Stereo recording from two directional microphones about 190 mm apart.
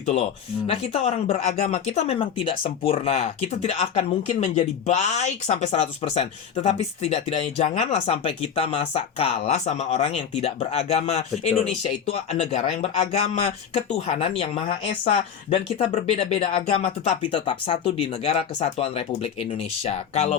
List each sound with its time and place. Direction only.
0.7 s speech: 30° left (ahead or behind)